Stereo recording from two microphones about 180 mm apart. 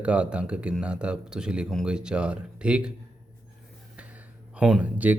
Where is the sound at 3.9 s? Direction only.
10° right (ahead or behind).